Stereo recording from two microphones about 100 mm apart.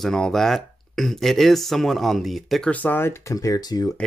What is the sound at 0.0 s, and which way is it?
Speech, 5° left (ahead or behind).